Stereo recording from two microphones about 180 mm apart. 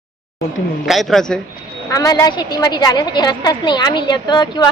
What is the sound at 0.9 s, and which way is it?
Speech, centre (ahead or behind).